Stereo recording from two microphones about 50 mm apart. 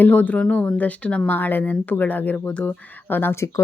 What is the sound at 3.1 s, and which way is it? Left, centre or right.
Speech, left.